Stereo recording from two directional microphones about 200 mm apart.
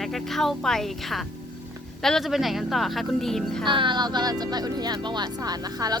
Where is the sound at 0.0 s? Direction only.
Centre (ahead or behind).